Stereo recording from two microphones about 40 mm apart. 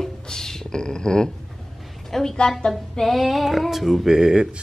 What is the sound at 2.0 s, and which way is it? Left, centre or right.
Speech, centre.